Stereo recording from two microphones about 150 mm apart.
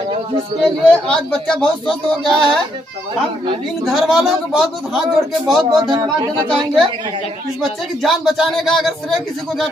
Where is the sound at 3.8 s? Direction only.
Centre (ahead or behind).